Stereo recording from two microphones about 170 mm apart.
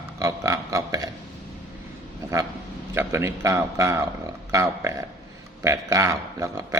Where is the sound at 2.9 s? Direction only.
15° right (ahead or behind).